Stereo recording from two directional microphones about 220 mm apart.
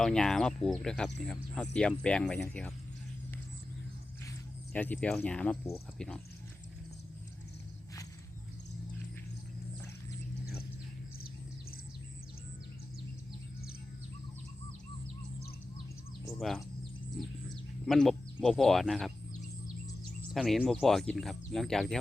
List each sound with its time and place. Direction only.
0.0 s speech: 5° left (ahead or behind)
4.3 s speech: 5° left (ahead or behind)
10.4 s a sound: 45° left (ahead or behind)
16.4 s speech: centre (ahead or behind)
17.2 s a sound: centre (ahead or behind)
20.3 s speech: centre (ahead or behind)